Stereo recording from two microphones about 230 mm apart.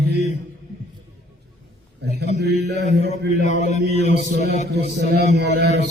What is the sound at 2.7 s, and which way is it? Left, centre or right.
Speech, left.